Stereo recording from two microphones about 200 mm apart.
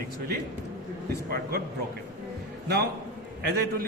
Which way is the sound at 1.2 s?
50° right (ahead or behind).